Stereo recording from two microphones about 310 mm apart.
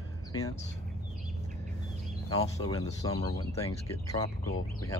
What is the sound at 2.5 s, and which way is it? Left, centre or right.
Speech, centre.